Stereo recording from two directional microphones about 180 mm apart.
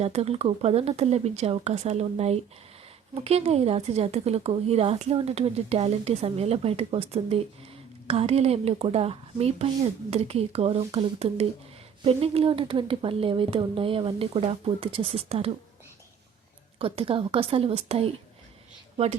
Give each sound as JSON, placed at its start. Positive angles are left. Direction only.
{"t": 0.0, "sound": "a woman's voice", "side_deg": -35}
{"t": 16.7, "sound": "a woman's voice", "side_deg": -30}